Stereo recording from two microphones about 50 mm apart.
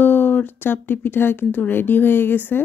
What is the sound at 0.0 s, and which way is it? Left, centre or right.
Speech, left.